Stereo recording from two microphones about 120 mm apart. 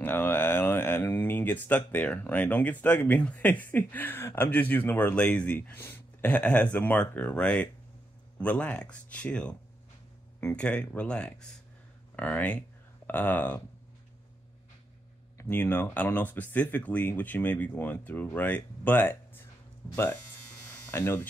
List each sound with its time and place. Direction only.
0.0 s speech: 15° left (ahead or behind)
15.3 s speech: 20° left (ahead or behind)
20.9 s speech: 20° left (ahead or behind)